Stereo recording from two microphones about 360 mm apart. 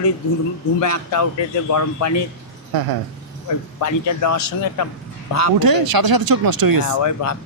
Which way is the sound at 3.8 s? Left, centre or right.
Left.